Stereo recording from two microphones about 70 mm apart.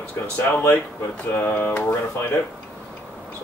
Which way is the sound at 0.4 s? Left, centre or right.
Left.